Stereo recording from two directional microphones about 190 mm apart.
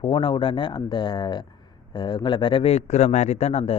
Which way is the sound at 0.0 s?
25° left (ahead or behind).